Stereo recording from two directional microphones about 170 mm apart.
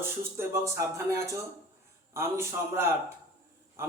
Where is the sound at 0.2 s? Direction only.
15° right (ahead or behind).